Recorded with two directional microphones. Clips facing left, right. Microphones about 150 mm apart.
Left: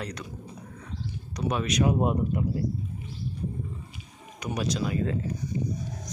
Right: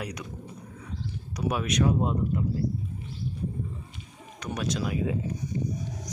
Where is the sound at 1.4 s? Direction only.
5° right (ahead or behind).